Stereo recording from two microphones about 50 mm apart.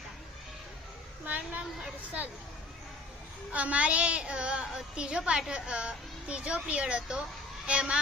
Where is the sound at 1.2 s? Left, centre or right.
Right.